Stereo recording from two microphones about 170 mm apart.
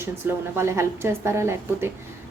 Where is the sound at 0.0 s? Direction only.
15° right (ahead or behind).